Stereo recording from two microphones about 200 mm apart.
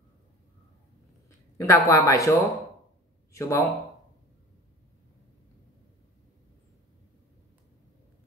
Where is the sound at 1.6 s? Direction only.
15° left (ahead or behind).